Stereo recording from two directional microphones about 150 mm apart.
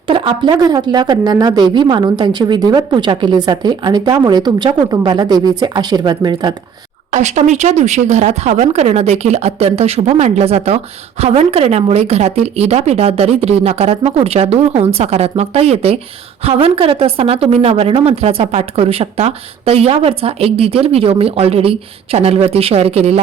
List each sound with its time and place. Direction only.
0.1 s a woman's voice: 35° right (ahead or behind)
7.1 s a woman's voice: 50° right (ahead or behind)